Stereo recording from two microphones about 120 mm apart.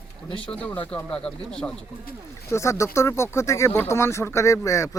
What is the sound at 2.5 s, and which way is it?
Speech, 25° left (ahead or behind).